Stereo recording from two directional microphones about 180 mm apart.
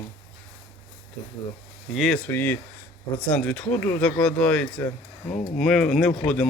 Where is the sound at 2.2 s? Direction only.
10° left (ahead or behind).